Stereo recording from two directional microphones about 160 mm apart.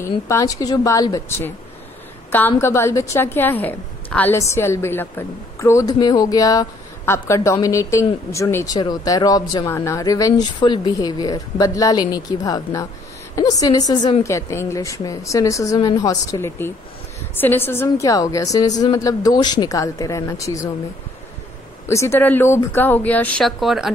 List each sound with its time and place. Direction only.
0.0 s a woman's voice: 20° left (ahead or behind)
21.8 s speech: 15° left (ahead or behind); by 23.9 s centre (ahead or behind)